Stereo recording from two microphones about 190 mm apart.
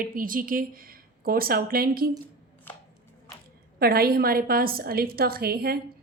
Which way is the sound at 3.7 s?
55° right (ahead or behind).